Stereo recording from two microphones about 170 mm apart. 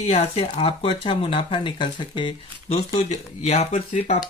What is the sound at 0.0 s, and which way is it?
Speech, 40° left (ahead or behind).